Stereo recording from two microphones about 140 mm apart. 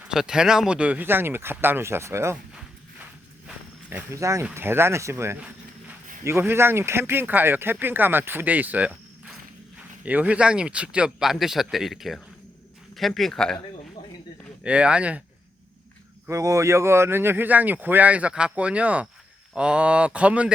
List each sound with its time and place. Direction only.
0.0 s speech: 5° right (ahead or behind)
3.4 s a sound: 10° right (ahead or behind)
4.5 s speech: 15° right (ahead or behind); by 13.6 s 5° left (ahead or behind)
14.6 s speech: 10° right (ahead or behind)
16.2 s speech: 25° right (ahead or behind)